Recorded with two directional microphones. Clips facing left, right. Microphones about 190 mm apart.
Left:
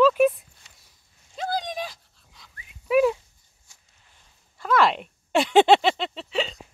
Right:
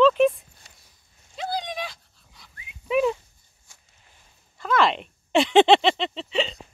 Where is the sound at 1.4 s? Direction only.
45° left (ahead or behind).